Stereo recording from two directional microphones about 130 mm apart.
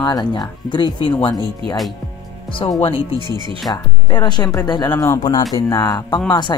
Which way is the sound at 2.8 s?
45° left (ahead or behind).